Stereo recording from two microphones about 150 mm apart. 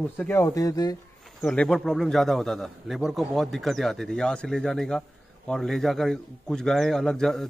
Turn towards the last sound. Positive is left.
turn(degrees=0)  # may be behind; listen again after turning